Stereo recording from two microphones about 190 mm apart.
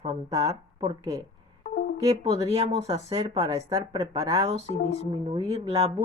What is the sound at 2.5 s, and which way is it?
Speech, 35° right (ahead or behind).